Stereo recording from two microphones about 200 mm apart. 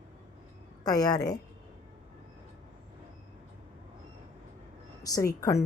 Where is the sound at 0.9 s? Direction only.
20° left (ahead or behind).